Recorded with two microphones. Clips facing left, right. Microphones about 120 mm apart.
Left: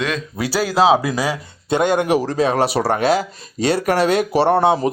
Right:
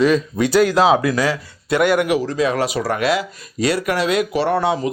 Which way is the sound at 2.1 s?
40° left (ahead or behind).